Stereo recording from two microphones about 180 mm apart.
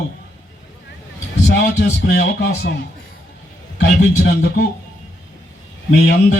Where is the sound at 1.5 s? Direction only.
75° left (ahead or behind).